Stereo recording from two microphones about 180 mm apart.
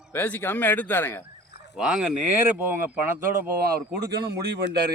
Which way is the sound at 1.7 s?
5° right (ahead or behind).